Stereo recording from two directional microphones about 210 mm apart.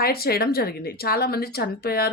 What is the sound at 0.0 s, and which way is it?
Speech, 45° left (ahead or behind).